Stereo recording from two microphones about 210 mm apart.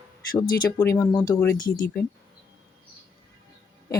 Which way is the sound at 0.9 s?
15° left (ahead or behind).